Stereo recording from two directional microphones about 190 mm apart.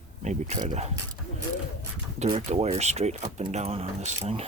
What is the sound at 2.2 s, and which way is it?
Speech, 35° right (ahead or behind).